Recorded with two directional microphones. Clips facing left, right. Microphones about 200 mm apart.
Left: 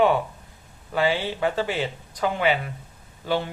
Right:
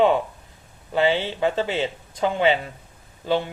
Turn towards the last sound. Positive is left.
turn(degrees=-20)  # may be behind; listen again after turning